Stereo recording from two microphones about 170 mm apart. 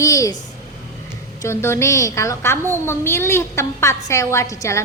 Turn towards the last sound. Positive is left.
turn(degrees=20)  # may be behind; listen again after turning